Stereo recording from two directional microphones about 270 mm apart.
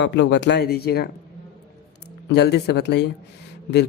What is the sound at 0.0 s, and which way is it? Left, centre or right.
Speech, left.